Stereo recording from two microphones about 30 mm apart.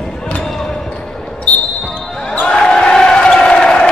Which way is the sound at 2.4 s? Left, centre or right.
Left.